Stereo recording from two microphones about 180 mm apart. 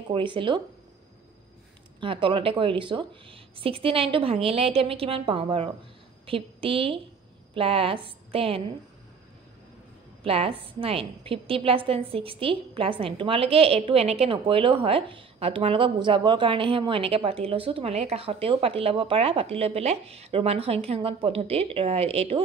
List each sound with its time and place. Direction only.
0.1 s speech: 25° right (ahead or behind)
2.0 s a woman's voice: 30° right (ahead or behind)
10.2 s a woman's voice: 30° right (ahead or behind)